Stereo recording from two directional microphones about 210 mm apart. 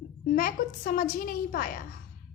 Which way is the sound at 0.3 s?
40° left (ahead or behind).